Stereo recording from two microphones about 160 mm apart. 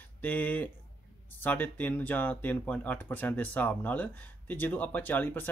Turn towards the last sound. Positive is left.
turn(degrees=10)  # may be behind; listen again after turning